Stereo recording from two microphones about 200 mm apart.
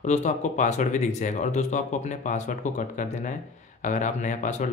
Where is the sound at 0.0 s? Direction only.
35° left (ahead or behind).